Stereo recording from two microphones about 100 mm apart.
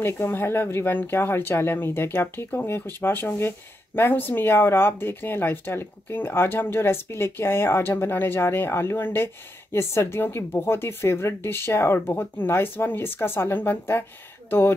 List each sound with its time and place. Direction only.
0.0 s speech: 20° left (ahead or behind)